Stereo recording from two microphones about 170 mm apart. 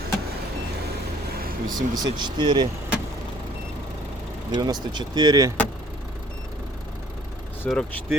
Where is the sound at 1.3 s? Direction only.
60° right (ahead or behind).